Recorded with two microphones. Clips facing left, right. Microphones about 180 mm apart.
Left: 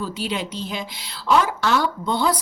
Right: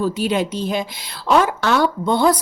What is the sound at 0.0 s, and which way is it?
A woman's voice, 45° right (ahead or behind).